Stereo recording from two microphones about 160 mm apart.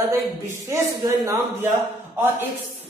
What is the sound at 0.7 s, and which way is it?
Speech, 20° right (ahead or behind).